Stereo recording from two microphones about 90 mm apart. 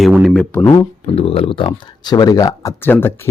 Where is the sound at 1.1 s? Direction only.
90° left.